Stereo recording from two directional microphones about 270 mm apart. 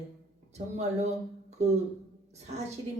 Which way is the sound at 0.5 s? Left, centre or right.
Right.